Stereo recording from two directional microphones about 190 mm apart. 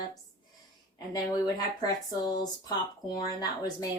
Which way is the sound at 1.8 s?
20° left (ahead or behind).